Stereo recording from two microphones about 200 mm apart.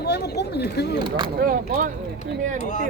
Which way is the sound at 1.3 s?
45° right (ahead or behind).